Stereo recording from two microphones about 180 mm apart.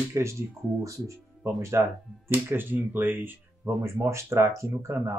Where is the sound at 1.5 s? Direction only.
15° right (ahead or behind).